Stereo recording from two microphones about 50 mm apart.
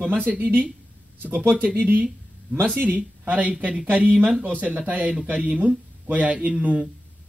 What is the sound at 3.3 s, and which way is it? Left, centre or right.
Speech, right.